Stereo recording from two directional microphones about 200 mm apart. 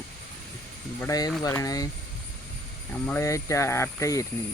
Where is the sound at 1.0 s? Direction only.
15° left (ahead or behind).